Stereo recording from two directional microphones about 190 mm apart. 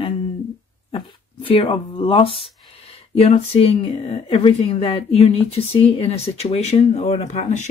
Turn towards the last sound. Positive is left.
turn(degrees=40)  # may be behind; listen again after turning